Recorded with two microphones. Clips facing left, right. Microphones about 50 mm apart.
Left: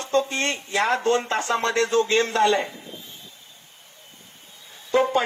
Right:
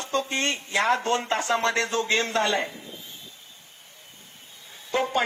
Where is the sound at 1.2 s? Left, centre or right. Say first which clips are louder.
Left 1 dB; right.